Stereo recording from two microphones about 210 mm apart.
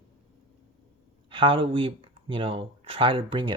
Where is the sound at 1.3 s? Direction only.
25° right (ahead or behind).